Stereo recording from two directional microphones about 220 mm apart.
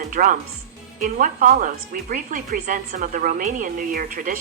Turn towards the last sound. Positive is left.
turn(degrees=-40)  # may be behind; listen again after turning